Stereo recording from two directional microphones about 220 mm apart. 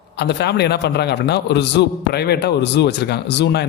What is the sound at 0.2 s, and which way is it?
A man's voice, 50° left (ahead or behind).